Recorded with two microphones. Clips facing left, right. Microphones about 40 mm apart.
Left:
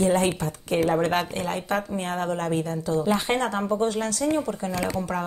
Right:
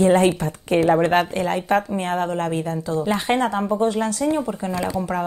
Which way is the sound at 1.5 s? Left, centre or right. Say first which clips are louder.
Right 6 dB; right.